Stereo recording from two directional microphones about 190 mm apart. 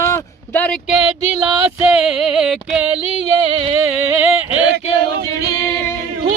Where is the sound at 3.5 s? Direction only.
35° right (ahead or behind).